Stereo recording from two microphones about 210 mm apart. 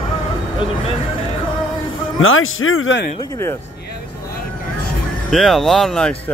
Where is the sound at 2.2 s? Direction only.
75° left (ahead or behind).